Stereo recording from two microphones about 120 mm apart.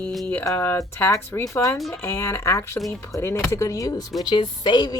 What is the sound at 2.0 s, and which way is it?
A woman's voice, 25° left (ahead or behind).